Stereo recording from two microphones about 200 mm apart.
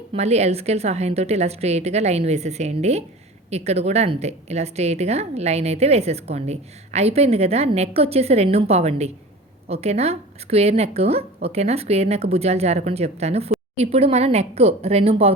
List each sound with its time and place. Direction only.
0.1 s a woman's voice: 30° right (ahead or behind)